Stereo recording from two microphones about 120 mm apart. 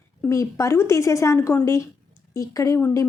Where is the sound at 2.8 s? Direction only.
15° left (ahead or behind).